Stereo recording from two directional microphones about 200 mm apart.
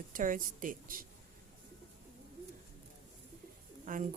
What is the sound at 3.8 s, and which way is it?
Speech, 40° right (ahead or behind).